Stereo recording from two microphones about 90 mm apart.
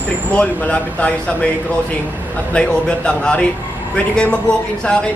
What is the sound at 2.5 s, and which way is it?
Speech, 10° left (ahead or behind).